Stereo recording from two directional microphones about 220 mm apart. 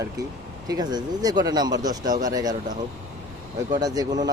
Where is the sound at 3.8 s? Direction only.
15° right (ahead or behind).